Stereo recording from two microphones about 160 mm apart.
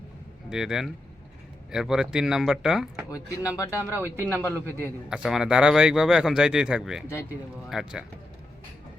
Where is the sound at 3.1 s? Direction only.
20° left (ahead or behind).